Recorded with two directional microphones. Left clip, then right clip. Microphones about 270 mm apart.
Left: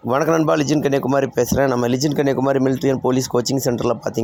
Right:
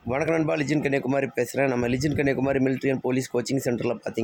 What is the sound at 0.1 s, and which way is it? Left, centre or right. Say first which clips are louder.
A man's voice: left 8 dB; centre.